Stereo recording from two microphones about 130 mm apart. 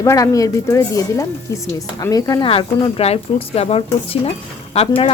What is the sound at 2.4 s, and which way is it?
Speech, 40° left (ahead or behind).